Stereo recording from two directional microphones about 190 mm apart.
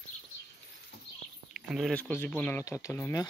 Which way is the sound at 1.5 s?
Centre (ahead or behind).